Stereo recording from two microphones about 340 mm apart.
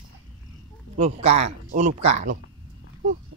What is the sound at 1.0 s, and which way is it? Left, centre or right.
Speech, centre.